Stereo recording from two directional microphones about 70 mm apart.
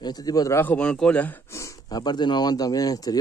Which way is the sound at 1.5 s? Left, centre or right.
Left.